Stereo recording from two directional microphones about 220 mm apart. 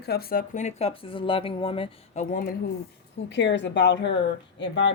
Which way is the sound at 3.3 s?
55° left (ahead or behind).